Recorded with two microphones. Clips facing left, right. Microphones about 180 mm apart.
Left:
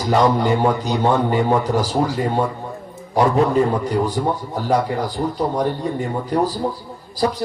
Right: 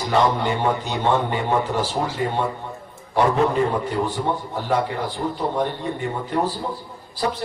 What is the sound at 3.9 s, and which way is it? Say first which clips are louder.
A man's voice: left 3 dB; 40° left (ahead or behind).